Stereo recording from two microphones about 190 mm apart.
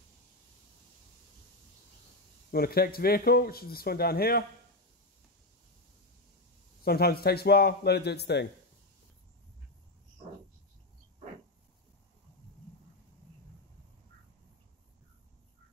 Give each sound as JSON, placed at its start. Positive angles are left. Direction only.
{"t": 2.5, "sound": "speech", "side_deg": 55}
{"t": 6.8, "sound": "speech", "side_deg": 55}